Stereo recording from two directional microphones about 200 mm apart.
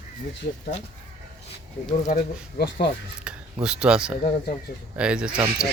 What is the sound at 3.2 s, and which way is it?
Speech, 5° right (ahead or behind).